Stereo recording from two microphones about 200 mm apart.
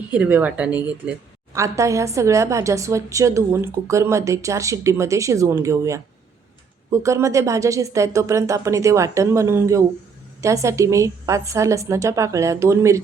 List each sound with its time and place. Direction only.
0.1 s a woman's voice: 10° right (ahead or behind)